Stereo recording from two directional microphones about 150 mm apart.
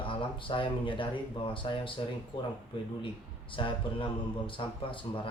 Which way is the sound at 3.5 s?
35° left (ahead or behind).